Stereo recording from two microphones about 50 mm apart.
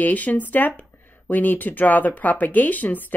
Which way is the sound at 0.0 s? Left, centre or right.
Left.